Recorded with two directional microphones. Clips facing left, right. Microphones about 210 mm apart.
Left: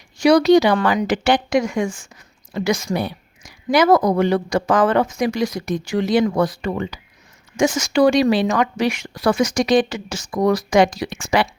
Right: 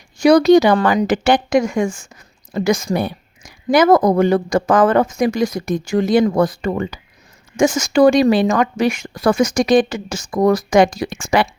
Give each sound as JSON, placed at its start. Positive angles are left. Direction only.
{"t": 0.2, "sound": "speech", "side_deg": -50}